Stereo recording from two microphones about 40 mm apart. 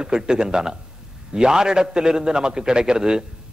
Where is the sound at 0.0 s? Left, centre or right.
Centre.